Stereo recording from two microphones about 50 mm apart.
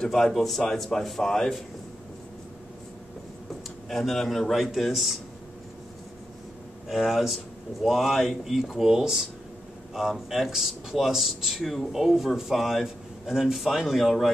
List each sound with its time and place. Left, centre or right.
0.0 s speech: centre
3.9 s speech: centre
6.9 s speech: centre